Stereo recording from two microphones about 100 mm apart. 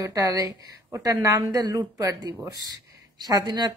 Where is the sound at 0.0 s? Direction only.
35° right (ahead or behind).